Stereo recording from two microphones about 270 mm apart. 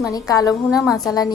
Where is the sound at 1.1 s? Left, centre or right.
Centre.